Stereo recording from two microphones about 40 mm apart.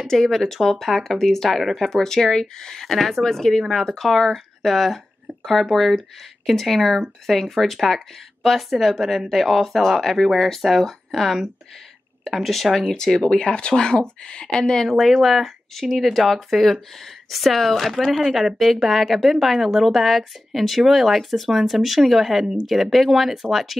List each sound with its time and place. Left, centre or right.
0.0 s speech: centre
1.6 s speech: centre
1.9 s speech: centre
12.8 s speech: centre
14.9 s speech: centre